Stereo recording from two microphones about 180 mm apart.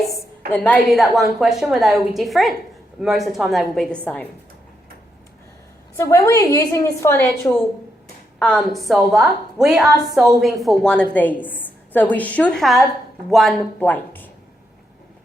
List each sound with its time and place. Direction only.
0.1 s a woman's voice: 10° left (ahead or behind)
6.0 s a woman's voice: 15° left (ahead or behind)
8.4 s a woman's voice: 5° left (ahead or behind)